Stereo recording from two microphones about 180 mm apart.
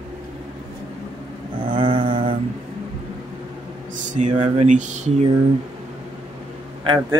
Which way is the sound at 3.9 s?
45° right (ahead or behind).